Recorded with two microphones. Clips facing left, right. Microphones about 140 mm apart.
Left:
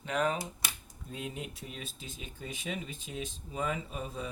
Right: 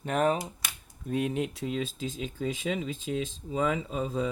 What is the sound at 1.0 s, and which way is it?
Speech, 70° right (ahead or behind).